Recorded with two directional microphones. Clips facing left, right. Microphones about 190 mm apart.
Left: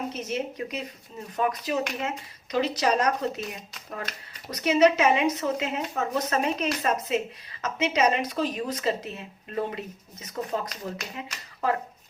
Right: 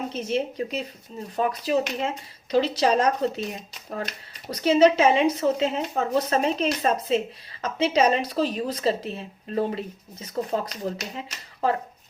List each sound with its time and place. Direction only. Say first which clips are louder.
0.1 s speech: right 4 dB; 30° right (ahead or behind)
4.5 s speech: right 3 dB; 30° right (ahead or behind)